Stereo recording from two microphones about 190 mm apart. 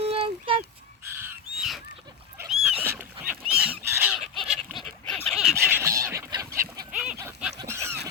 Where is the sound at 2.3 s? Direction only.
5° right (ahead or behind).